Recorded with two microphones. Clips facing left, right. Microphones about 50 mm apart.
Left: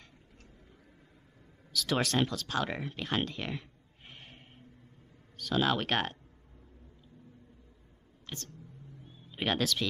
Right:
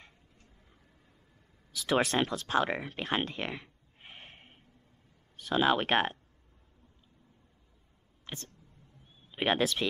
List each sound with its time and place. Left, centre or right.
1.7 s speech: right
2.9 s a sound: right
5.4 s speech: right
8.3 s vehicle: centre
9.3 s speech: right